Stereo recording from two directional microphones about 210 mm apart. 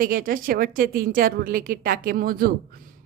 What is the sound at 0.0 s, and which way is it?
A woman's voice, 40° right (ahead or behind).